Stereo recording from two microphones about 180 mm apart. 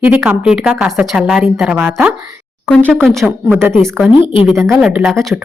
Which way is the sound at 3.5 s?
15° right (ahead or behind).